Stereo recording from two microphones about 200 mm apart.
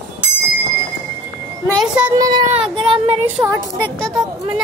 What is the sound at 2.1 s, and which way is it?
Speech, 20° right (ahead or behind).